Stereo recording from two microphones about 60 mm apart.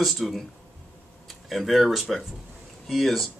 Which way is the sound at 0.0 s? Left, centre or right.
Centre.